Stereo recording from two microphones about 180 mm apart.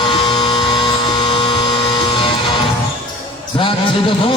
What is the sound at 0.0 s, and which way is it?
Music, 25° left (ahead or behind).